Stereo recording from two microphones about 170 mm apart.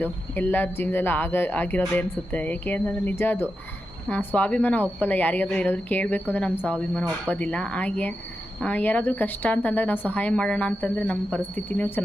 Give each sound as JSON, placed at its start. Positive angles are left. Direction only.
{"t": 0.0, "sound": "speech", "side_deg": 10}